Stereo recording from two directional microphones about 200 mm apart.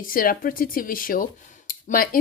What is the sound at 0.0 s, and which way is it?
A woman's voice, 45° left (ahead or behind).